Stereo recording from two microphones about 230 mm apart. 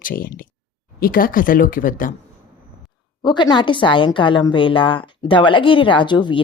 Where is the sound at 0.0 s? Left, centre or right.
Left.